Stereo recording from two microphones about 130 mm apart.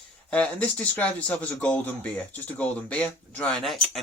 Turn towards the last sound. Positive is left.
turn(degrees=0)  # may be behind; listen again after turning